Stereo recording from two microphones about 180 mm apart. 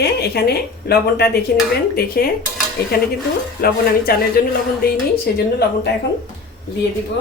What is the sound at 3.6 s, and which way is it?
Speech, 55° left (ahead or behind).